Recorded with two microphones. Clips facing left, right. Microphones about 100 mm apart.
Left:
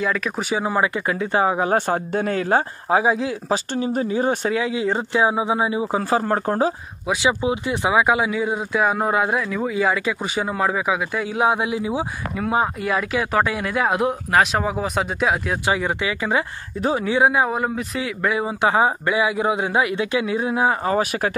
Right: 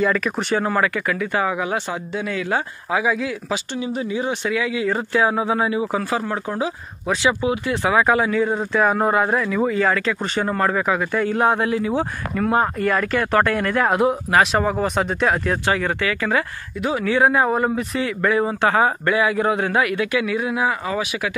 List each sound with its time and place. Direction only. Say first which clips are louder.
0.0 s speech: right 3 dB; centre (ahead or behind); by 3.5 s 30° left (ahead or behind)
3.7 s speech: left 2 dB; 40° left (ahead or behind)
4.6 s a man's voice: even; 30° left (ahead or behind)
6.0 s speech: left 4 dB; 40° left (ahead or behind)
7.2 s speech: right 1 dB; 20° left (ahead or behind); by 15.7 s 5° left (ahead or behind)
15.7 s a man's voice: left 2 dB; 15° left (ahead or behind); by 21.3 s 45° left (ahead or behind)